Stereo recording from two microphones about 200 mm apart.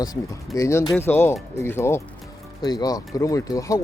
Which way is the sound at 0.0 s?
15° left (ahead or behind).